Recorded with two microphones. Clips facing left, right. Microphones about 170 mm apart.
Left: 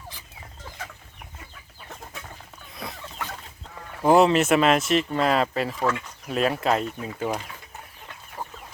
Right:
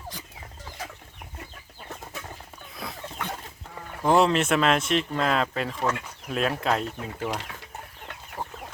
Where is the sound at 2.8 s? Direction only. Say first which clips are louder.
Left 1 dB; centre (ahead or behind).